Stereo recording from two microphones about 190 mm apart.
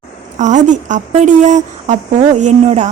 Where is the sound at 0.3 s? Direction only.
40° right (ahead or behind).